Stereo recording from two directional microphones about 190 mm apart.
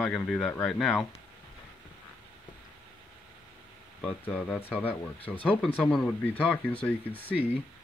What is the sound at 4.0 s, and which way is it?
Speech, 5° left (ahead or behind).